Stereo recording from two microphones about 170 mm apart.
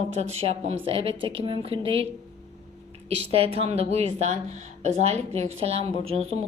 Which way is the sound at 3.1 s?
35° right (ahead or behind).